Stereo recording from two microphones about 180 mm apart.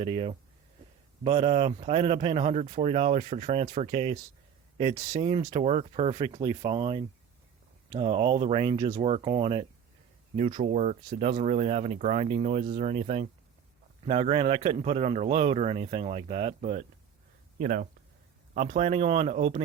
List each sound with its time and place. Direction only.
0.0 s speech: 30° right (ahead or behind)
5.4 s speech: 20° right (ahead or behind)
5.6 s speech: 35° right (ahead or behind)
10.6 s speech: 40° right (ahead or behind)
17.6 s speech: 50° right (ahead or behind)
18.5 s speech: 35° right (ahead or behind)